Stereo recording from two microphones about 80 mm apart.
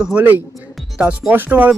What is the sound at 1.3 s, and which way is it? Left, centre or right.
Speech, right.